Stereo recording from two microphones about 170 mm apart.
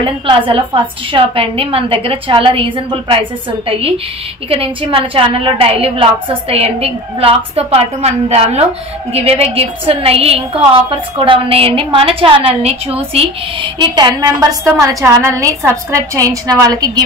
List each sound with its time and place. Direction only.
0.0 s a woman's voice: 30° right (ahead or behind)
4.5 s a woman's voice: 30° right (ahead or behind)